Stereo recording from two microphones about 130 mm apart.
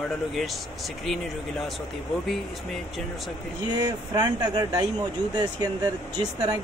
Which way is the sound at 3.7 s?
30° right (ahead or behind).